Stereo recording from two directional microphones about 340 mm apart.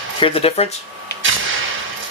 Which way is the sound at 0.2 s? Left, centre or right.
Centre.